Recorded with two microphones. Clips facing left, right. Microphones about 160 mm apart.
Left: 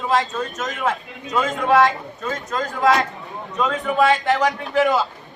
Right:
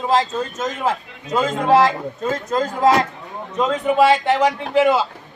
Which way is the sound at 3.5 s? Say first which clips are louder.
Right 3 dB; 20° right (ahead or behind).